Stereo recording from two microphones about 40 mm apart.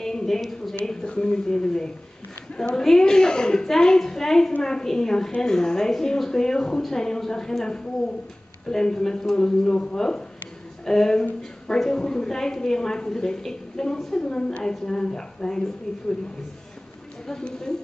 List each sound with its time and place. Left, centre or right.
0.0 s speech: centre
1.0 s a woman's voice: left
17.3 s a woman's voice: centre